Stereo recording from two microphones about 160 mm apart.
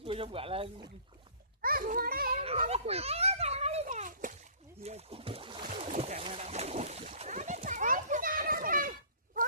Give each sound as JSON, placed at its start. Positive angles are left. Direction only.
{"t": 0.0, "sound": "speech", "side_deg": -35}
{"t": 1.6, "sound": "a child's voice", "side_deg": -60}
{"t": 2.6, "sound": "children playing", "side_deg": -40}
{"t": 3.8, "sound": "a sound", "side_deg": -50}
{"t": 4.8, "sound": "a sound", "side_deg": -40}
{"t": 5.7, "sound": "boat", "side_deg": -40}